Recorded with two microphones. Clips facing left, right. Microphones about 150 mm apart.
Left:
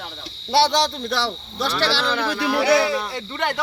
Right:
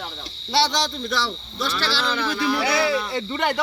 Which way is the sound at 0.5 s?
55° left (ahead or behind).